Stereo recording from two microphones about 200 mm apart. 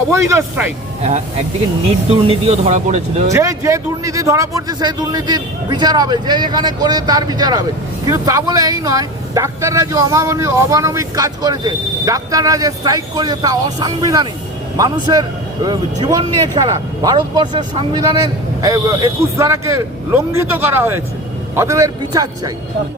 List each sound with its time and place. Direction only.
0.1 s speech: 15° right (ahead or behind)
2.0 s speech: 30° right (ahead or behind)
3.3 s a man's voice: 15° right (ahead or behind)